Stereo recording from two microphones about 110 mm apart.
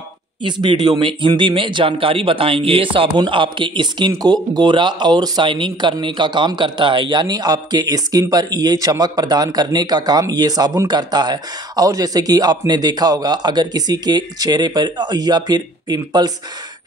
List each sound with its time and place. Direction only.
0.4 s speech: 45° right (ahead or behind)